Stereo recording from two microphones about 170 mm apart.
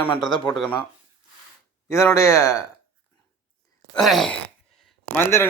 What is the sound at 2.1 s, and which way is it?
Speech, 15° left (ahead or behind).